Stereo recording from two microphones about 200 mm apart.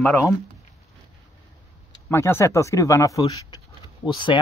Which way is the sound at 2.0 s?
10° left (ahead or behind).